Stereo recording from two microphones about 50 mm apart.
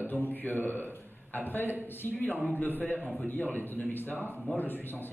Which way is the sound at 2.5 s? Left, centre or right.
Left.